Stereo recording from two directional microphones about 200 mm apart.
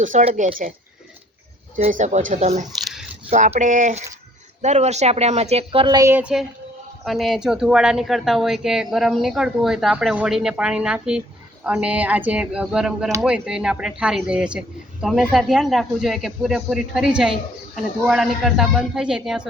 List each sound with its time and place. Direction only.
0.0 s a woman's voice: 40° right (ahead or behind)
1.7 s a woman's voice: 40° right (ahead or behind)
2.8 s squish: centre (ahead or behind)
3.2 s a woman's voice: 35° right (ahead or behind); by 19.5 s 5° right (ahead or behind)